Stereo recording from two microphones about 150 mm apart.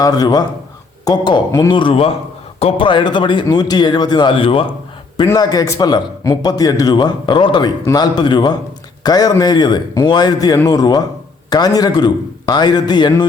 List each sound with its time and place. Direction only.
0.0 s a man's voice: 25° left (ahead or behind)
5.1 s a man's voice: 25° left (ahead or behind)